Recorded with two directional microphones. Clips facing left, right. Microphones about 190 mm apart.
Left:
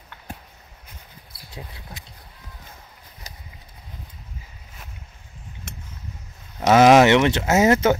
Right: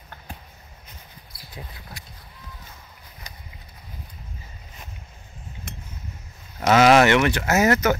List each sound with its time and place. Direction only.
1.7 s speech: 20° left (ahead or behind)
6.6 s speech: 15° left (ahead or behind)